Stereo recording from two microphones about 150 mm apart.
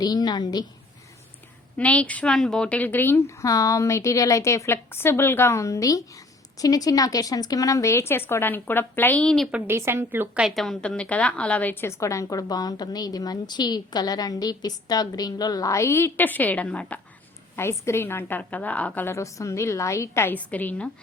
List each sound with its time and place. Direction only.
0.0 s a woman's voice: 25° left (ahead or behind)
1.8 s a woman's voice: 10° left (ahead or behind)
9.5 s a woman's voice: 10° right (ahead or behind); by 20.9 s 10° left (ahead or behind)